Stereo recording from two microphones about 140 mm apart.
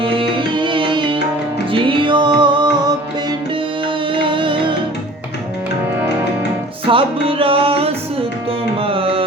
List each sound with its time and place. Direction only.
0.0 s music: 40° right (ahead or behind)
4.1 s music: 35° right (ahead or behind)
6.8 s music: 40° right (ahead or behind)